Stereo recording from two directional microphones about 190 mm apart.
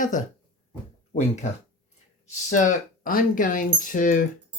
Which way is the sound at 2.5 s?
40° left (ahead or behind).